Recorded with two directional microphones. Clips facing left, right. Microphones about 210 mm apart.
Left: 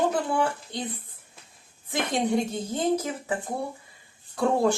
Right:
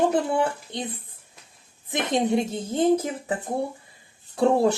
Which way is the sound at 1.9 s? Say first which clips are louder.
Right 3 dB; 20° right (ahead or behind).